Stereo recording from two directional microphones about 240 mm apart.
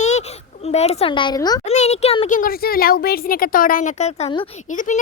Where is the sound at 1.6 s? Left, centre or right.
Left.